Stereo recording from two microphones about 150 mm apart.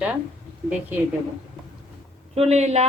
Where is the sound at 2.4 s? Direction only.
45° right (ahead or behind).